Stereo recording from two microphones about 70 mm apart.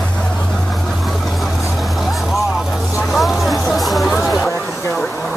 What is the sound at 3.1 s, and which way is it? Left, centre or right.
Vehicle, centre.